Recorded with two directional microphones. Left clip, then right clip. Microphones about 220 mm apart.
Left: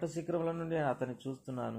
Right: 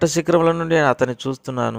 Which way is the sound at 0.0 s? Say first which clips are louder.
Right 19 dB; 60° right (ahead or behind).